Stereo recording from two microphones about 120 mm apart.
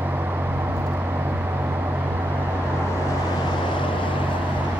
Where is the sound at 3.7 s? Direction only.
45° left (ahead or behind).